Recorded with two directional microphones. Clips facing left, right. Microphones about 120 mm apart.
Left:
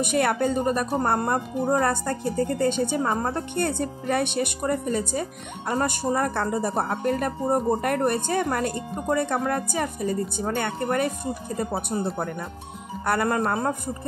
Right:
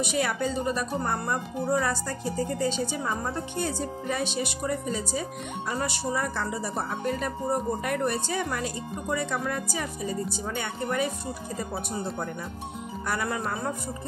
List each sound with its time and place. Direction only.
0.0 s a woman's voice: 55° left (ahead or behind)